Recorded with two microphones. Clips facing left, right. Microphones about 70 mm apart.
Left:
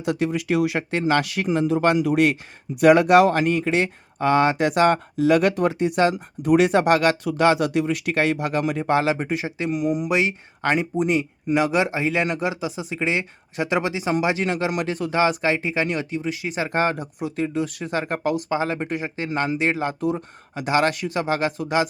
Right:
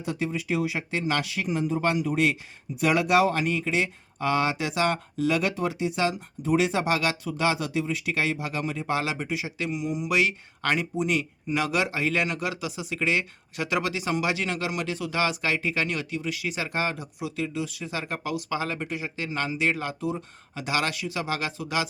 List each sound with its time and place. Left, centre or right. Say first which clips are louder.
0.0 s speech: left 6 dB; left
2.0 s speech: left 6 dB; left
2.8 s speech: left 8 dB; left
4.2 s speech: left 7 dB; left
6.4 s speech: left 7 dB; left
10.1 s speech: left 3 dB; left